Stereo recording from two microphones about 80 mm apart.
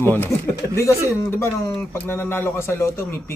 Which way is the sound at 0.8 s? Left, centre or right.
Left.